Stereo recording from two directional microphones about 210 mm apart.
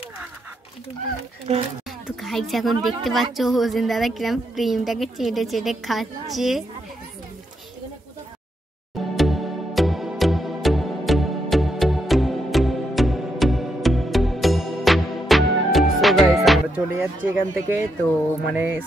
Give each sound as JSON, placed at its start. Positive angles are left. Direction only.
{"t": 1.5, "sound": "speech", "side_deg": -30}
{"t": 1.9, "sound": "a woman's voice", "side_deg": 0}
{"t": 9.1, "sound": "music", "side_deg": 0}